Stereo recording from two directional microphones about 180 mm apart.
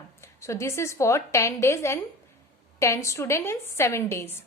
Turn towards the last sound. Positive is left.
turn(degrees=15)  # may be behind; listen again after turning